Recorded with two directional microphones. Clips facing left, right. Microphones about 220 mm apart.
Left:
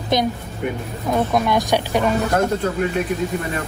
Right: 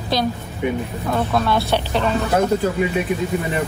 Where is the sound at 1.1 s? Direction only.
15° left (ahead or behind).